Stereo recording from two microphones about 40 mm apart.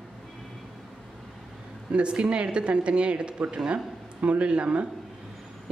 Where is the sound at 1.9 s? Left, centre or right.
Right.